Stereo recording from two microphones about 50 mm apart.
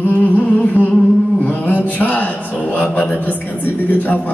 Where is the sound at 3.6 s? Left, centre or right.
Left.